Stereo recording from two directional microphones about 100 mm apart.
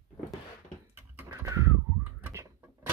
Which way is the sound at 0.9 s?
25° right (ahead or behind).